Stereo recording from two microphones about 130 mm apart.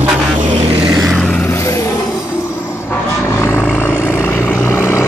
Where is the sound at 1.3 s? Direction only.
20° left (ahead or behind).